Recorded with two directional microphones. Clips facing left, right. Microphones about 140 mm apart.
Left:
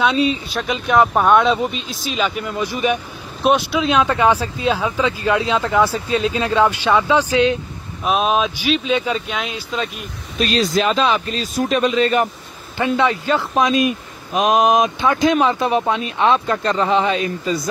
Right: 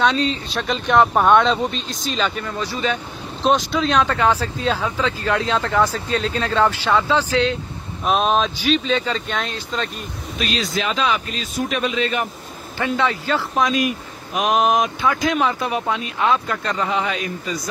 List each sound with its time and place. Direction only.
0.0 s speech: 10° left (ahead or behind)
8.0 s speech: 5° left (ahead or behind)
10.4 s speech: 35° left (ahead or behind)
12.7 s speech: 15° left (ahead or behind)